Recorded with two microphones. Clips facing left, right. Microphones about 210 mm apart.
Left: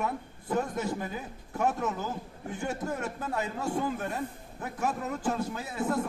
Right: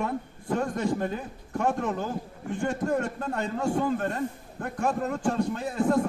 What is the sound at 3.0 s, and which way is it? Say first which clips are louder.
A man's voice: right 3 dB; 5° left (ahead or behind).